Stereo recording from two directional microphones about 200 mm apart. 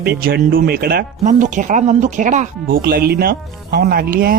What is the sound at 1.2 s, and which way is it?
Speech, 40° right (ahead or behind).